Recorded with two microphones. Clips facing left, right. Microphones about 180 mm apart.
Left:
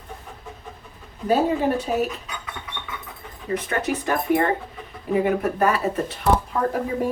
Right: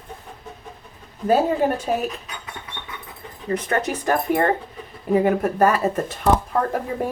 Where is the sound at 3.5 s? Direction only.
40° right (ahead or behind).